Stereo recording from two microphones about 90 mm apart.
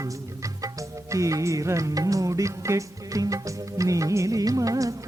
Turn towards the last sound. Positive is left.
turn(degrees=-40)  # may be behind; listen again after turning